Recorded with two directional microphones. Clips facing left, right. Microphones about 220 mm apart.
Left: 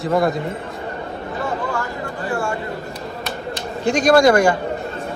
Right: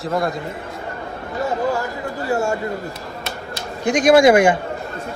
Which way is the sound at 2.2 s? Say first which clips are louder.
Right 3 dB; 25° right (ahead or behind).